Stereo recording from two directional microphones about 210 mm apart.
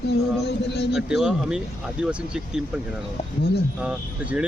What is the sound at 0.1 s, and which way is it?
Speech, 55° left (ahead or behind).